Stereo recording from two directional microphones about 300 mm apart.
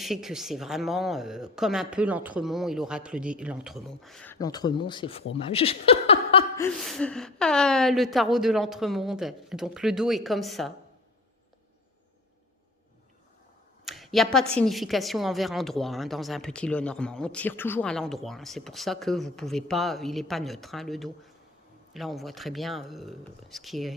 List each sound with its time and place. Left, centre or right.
0.0 s speech: centre
6.7 s speech: centre
13.8 s a sound: centre
14.6 s speech: centre